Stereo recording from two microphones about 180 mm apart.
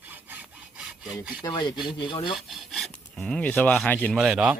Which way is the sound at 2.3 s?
Centre (ahead or behind).